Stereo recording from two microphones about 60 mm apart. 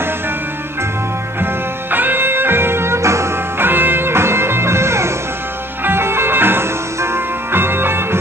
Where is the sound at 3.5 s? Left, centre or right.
Right.